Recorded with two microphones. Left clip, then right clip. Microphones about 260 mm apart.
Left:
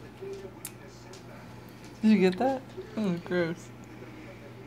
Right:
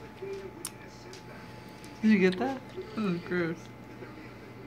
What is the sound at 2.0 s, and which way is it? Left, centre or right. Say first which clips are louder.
A woman's voice: left 2 dB; left.